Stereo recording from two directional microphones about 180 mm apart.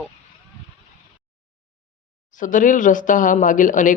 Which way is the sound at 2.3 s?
45° left (ahead or behind).